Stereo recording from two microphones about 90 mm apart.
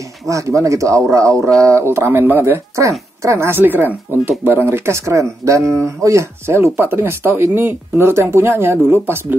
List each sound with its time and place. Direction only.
0.3 s speech: 35° right (ahead or behind)